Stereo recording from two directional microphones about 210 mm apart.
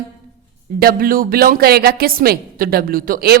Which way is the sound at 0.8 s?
45° right (ahead or behind).